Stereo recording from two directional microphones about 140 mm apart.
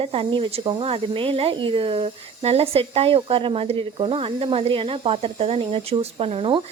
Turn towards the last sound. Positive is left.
turn(degrees=-40)  # may be behind; listen again after turning